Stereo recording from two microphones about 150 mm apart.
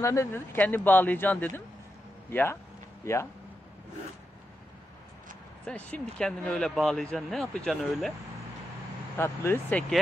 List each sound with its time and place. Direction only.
0.0 s speech: 20° left (ahead or behind)
5.7 s speech: 10° left (ahead or behind)
9.1 s speech: 15° left (ahead or behind)